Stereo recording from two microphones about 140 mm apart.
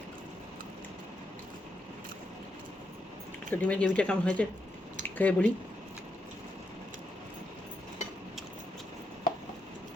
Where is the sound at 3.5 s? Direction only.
10° left (ahead or behind).